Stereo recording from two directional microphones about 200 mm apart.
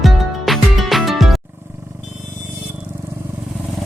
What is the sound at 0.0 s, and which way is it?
Music, centre (ahead or behind).